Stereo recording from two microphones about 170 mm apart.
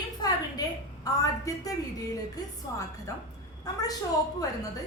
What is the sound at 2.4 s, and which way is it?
Music, 25° left (ahead or behind).